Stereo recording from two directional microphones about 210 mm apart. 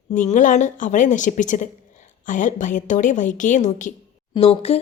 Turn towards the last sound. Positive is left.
turn(degrees=25)  # may be behind; listen again after turning